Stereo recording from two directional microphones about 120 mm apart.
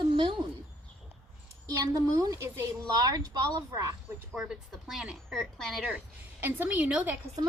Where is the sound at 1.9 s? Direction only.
30° right (ahead or behind).